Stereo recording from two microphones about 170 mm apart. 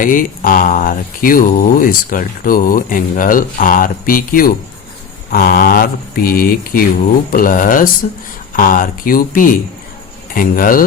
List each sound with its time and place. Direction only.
0.0 s speech: 55° left (ahead or behind)